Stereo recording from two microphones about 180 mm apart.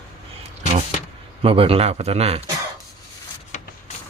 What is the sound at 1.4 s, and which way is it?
A man's voice, 30° right (ahead or behind).